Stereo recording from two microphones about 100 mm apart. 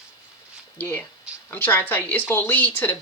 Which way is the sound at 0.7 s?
20° left (ahead or behind).